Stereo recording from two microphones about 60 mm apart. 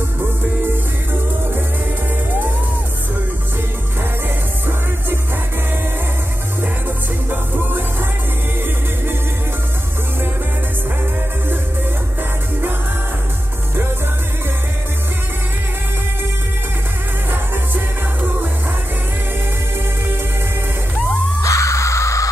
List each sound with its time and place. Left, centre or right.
7.2 s music: right
21.4 s music: left